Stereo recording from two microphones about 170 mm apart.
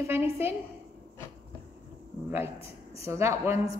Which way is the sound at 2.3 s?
15° right (ahead or behind).